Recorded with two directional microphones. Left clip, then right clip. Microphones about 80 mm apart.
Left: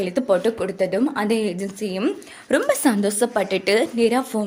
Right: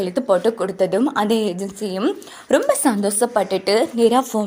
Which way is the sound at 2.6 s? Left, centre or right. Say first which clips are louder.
Right 2 dB; centre.